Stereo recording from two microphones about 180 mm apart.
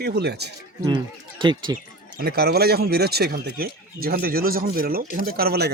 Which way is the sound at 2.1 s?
60° right (ahead or behind).